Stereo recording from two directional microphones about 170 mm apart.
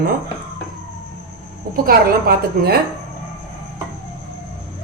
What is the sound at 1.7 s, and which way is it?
Speech, 60° right (ahead or behind).